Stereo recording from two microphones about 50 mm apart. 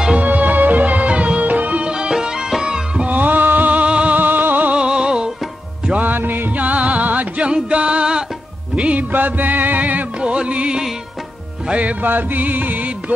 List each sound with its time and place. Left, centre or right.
0.2 s music: right; by 3.1 s centre
3.1 s music: right
4.2 s music: right
4.7 s music: centre
5.9 s music: right
7.4 s music: right
9.1 s music: right
10.2 s music: right
12.0 s music: right